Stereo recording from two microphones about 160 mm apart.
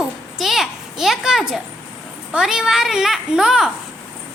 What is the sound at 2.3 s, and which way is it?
A child's voice, 5° right (ahead or behind).